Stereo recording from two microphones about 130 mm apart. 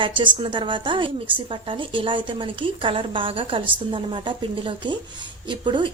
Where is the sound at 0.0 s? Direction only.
40° right (ahead or behind).